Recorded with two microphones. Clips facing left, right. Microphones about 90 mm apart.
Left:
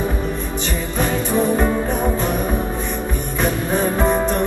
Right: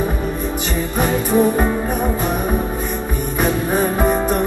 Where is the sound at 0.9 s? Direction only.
20° right (ahead or behind).